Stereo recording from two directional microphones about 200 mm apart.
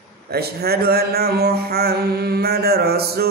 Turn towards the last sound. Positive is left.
turn(degrees=-50)  # may be behind; listen again after turning